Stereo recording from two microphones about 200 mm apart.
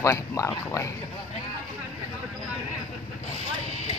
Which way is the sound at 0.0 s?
15° left (ahead or behind).